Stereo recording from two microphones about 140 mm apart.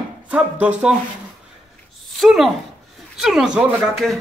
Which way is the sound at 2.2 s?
Centre (ahead or behind).